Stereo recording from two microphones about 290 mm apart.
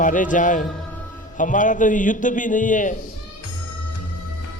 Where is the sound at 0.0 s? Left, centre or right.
Left.